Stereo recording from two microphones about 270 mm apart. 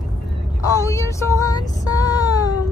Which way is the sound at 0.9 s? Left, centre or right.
Centre.